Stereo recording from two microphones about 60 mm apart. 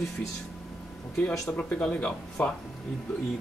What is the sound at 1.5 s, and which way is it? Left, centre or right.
Speech, left.